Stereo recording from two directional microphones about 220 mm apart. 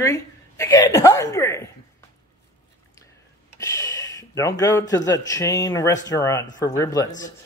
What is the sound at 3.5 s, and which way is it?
A man's voice, 15° left (ahead or behind).